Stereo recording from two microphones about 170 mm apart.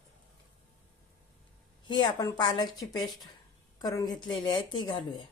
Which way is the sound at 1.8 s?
25° left (ahead or behind).